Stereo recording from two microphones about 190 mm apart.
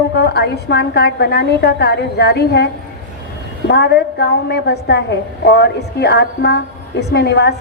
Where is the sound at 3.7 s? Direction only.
60° left (ahead or behind).